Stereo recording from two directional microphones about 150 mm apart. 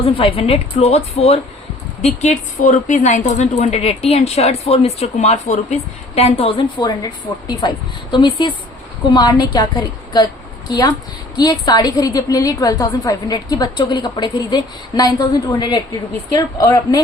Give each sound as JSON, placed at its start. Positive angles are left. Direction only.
{"t": 0.0, "sound": "a woman's voice", "side_deg": 40}
{"t": 10.7, "sound": "a woman's voice", "side_deg": 25}